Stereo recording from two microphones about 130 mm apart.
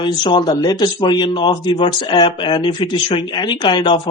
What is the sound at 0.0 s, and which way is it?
Speech, 35° left (ahead or behind).